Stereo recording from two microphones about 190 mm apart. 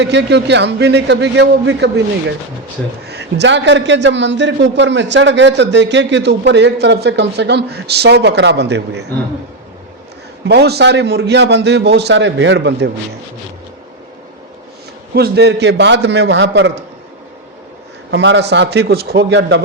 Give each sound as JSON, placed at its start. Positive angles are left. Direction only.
{"t": 0.0, "sound": "a man's voice", "side_deg": -65}
{"t": 3.1, "sound": "a man's voice", "side_deg": -60}
{"t": 10.4, "sound": "a man's voice", "side_deg": -60}
{"t": 15.1, "sound": "a man's voice", "side_deg": -60}
{"t": 18.1, "sound": "a man's voice", "side_deg": -70}